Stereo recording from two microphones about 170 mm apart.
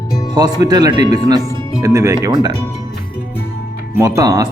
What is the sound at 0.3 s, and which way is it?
A man's voice, 25° right (ahead or behind).